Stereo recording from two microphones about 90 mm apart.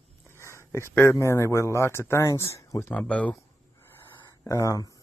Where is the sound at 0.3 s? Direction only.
30° left (ahead or behind).